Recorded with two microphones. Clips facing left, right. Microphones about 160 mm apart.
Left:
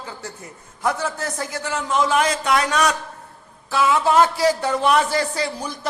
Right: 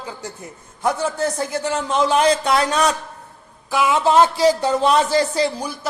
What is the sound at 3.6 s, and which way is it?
A man's voice, 15° right (ahead or behind).